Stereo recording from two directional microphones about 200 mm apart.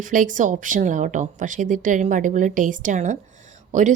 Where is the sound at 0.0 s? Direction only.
40° right (ahead or behind).